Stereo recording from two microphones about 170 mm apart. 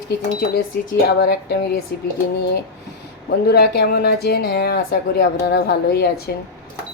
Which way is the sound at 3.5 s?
70° left (ahead or behind).